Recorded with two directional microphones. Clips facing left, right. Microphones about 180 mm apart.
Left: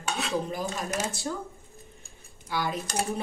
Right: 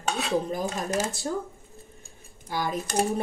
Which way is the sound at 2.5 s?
45° right (ahead or behind).